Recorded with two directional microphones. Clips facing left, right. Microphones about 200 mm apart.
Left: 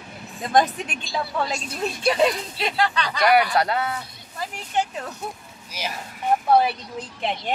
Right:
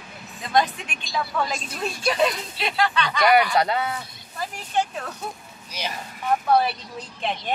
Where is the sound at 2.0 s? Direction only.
30° left (ahead or behind).